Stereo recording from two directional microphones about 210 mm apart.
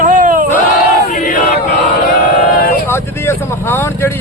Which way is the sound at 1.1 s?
40° left (ahead or behind).